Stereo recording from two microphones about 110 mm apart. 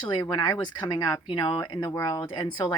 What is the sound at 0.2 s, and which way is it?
Speech, 35° left (ahead or behind).